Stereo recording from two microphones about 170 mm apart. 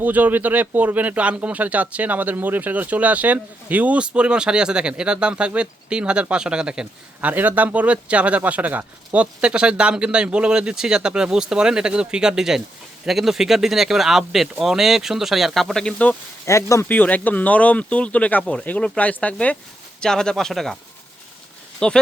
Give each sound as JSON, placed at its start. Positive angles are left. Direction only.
{"t": 0.0, "sound": "speech", "side_deg": -10}
{"t": 21.8, "sound": "speech", "side_deg": 5}